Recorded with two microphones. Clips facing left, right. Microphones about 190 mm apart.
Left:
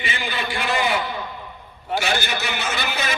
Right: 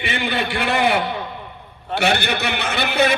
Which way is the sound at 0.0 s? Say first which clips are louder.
Right 5 dB; 60° right (ahead or behind).